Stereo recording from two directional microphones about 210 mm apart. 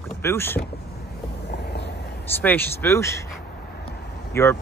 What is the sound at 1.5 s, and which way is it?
Vehicle, 55° left (ahead or behind).